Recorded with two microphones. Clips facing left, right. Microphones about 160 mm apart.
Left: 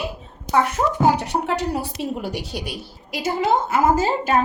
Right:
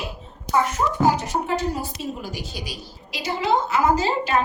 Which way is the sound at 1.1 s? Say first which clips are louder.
Left 2 dB; 65° left (ahead or behind).